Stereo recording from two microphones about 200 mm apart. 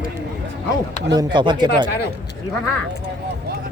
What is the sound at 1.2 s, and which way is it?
Speech, 25° right (ahead or behind).